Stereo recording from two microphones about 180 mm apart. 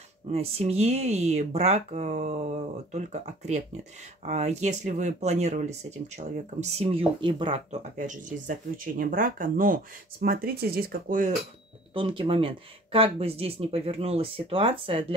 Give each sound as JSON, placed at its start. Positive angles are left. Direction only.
{"t": 0.3, "sound": "speech", "side_deg": -35}
{"t": 8.0, "sound": "speech", "side_deg": -45}
{"t": 11.9, "sound": "speech", "side_deg": -30}